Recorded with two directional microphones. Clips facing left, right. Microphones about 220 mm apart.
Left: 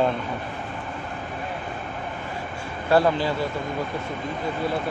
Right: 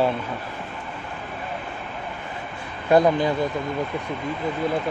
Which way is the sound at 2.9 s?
20° right (ahead or behind).